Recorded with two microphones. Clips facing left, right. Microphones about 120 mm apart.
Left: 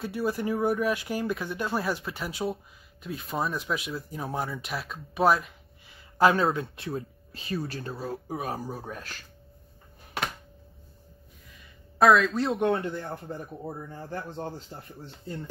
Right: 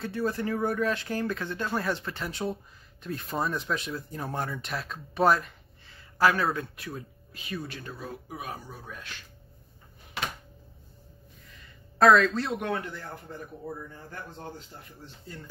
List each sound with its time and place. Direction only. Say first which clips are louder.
0.0 s speech: left 1 dB; 10° left (ahead or behind)
5.9 s speech: left 2 dB; 20° left (ahead or behind); by 9.2 s 40° left (ahead or behind)
12.0 s speech: even; 5° left (ahead or behind)
12.4 s speech: left 5 dB; 30° left (ahead or behind)